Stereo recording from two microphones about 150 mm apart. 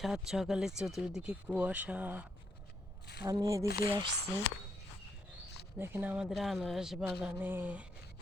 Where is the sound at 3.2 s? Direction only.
25° right (ahead or behind).